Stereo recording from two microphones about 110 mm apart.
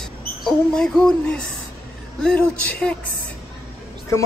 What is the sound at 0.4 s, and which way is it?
A man's voice, 5° left (ahead or behind).